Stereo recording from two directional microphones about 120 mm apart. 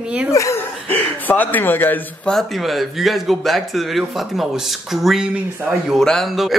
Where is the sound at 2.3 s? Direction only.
Centre (ahead or behind).